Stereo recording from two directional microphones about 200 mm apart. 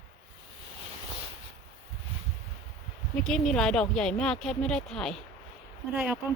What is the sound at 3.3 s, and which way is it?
Speech, 5° left (ahead or behind).